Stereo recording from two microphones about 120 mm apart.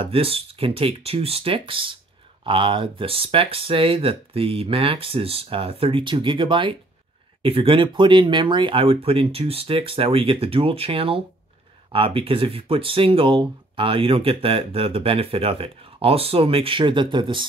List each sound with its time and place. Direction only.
0.0 s speech: 50° right (ahead or behind)